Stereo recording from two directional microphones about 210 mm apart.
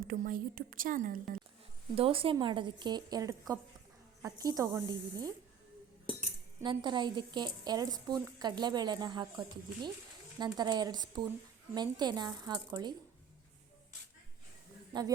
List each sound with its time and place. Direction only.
0.1 s a woman's voice: 40° right (ahead or behind)
2.0 s speech: 25° right (ahead or behind)
6.6 s speech: 20° right (ahead or behind)